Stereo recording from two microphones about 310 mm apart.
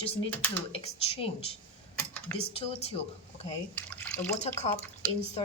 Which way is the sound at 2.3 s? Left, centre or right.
Centre.